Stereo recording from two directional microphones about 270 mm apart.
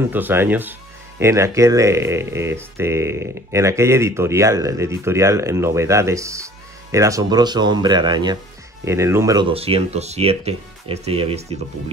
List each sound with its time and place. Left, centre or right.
0.1 s speech: centre